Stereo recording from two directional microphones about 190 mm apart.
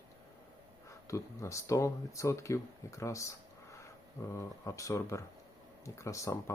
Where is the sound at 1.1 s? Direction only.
15° left (ahead or behind).